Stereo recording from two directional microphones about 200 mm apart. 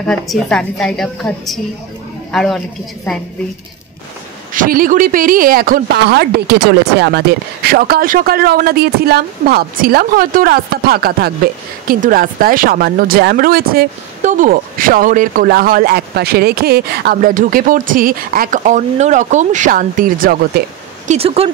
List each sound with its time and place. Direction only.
0.0 s a woman's voice: 5° left (ahead or behind)
4.6 s a woman's voice: 45° right (ahead or behind)
21.1 s speech: 30° right (ahead or behind)